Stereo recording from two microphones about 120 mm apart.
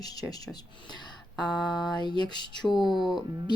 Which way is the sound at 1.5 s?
5° left (ahead or behind).